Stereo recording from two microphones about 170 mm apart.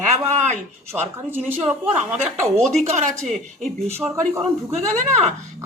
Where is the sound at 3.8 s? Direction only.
15° right (ahead or behind).